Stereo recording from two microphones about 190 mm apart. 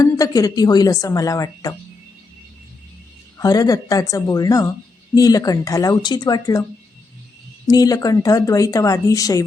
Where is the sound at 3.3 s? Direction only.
20° left (ahead or behind).